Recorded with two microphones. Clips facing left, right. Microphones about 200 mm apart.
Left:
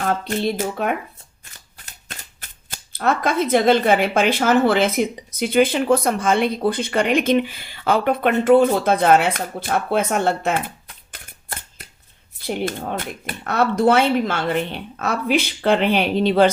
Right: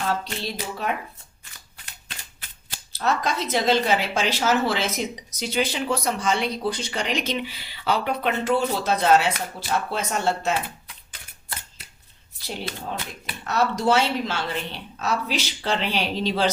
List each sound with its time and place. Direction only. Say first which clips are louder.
0.0 s speech: left 6 dB; 50° left (ahead or behind)